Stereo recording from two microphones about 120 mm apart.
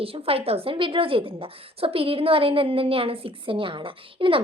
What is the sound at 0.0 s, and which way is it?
A woman's voice, 50° right (ahead or behind).